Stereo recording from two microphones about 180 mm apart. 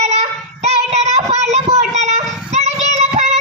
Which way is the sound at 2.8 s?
40° right (ahead or behind).